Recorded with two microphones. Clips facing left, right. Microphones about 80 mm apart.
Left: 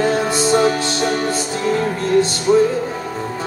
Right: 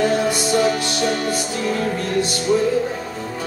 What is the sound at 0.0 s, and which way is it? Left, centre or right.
Music, left.